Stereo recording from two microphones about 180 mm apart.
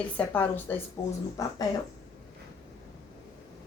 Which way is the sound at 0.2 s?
5° left (ahead or behind).